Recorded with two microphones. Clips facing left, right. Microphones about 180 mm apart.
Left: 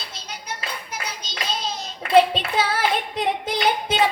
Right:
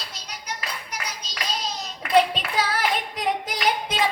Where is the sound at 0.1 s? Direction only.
25° left (ahead or behind).